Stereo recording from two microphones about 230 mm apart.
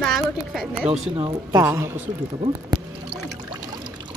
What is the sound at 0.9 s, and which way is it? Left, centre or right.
Speech, right.